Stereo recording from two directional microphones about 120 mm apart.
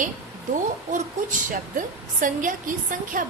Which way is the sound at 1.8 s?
90° right.